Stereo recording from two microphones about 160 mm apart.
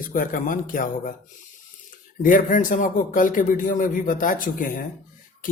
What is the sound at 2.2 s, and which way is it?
Speech, 55° left (ahead or behind).